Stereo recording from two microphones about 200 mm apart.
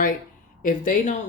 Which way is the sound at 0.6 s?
40° left (ahead or behind).